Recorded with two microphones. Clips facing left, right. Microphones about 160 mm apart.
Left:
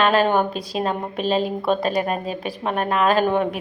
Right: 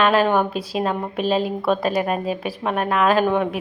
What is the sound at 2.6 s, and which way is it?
Speech, 35° left (ahead or behind).